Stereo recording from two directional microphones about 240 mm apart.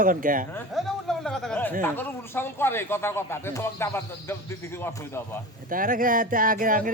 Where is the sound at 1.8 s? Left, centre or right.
Centre.